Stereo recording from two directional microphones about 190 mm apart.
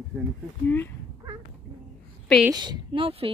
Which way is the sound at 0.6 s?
10° left (ahead or behind).